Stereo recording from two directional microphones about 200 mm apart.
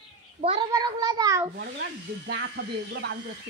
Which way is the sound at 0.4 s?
30° right (ahead or behind).